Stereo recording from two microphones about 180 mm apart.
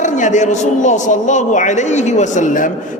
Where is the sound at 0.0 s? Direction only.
40° left (ahead or behind).